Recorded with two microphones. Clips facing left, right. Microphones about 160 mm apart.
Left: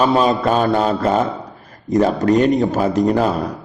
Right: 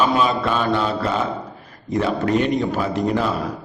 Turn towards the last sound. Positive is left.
turn(degrees=40)  # may be behind; listen again after turning